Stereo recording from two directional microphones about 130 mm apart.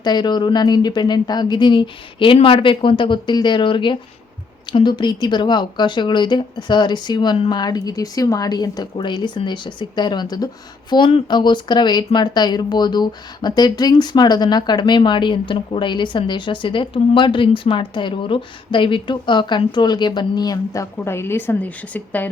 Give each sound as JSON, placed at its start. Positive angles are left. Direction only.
{"t": 0.0, "sound": "speech", "side_deg": 35}